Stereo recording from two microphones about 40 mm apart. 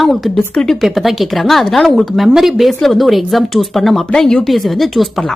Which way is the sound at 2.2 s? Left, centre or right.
Centre.